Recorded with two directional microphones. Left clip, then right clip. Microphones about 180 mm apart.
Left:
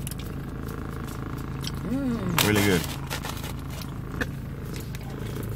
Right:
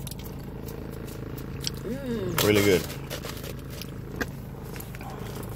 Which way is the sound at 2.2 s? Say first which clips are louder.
Right 2 dB; 15° right (ahead or behind).